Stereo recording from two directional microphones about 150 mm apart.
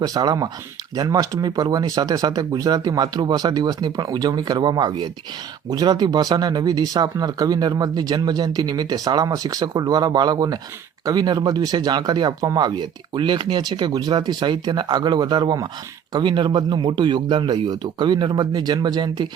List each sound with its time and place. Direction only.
0.0 s speech: 25° right (ahead or behind)